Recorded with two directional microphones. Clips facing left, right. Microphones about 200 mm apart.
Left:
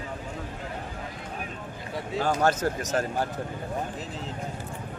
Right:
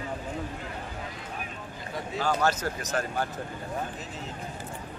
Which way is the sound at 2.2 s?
50° left (ahead or behind).